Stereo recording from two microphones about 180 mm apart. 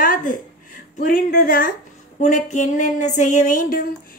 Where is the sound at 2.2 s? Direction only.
45° left (ahead or behind).